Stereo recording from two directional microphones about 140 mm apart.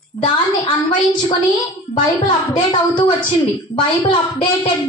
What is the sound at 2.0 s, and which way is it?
A woman's voice, 35° left (ahead or behind).